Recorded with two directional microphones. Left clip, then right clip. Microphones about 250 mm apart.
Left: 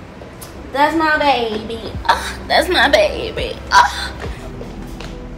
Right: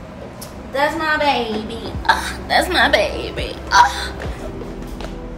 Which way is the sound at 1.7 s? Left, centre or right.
Centre.